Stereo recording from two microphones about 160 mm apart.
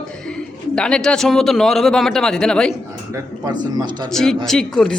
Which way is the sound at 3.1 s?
25° right (ahead or behind).